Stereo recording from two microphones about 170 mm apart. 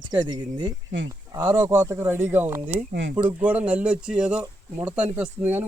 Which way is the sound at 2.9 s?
75° right (ahead or behind).